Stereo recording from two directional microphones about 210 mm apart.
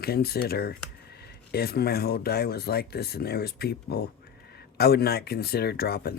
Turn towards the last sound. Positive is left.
turn(degrees=50)  # may be behind; listen again after turning